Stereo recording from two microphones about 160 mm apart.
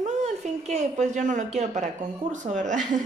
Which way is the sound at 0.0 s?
45° right (ahead or behind).